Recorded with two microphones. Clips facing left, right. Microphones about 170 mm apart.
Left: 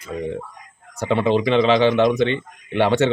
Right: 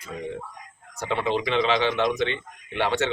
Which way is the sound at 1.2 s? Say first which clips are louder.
Left 7 dB; 25° left (ahead or behind).